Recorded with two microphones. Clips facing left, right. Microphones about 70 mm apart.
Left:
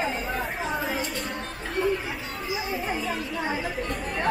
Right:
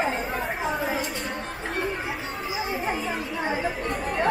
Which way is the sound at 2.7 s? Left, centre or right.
Right.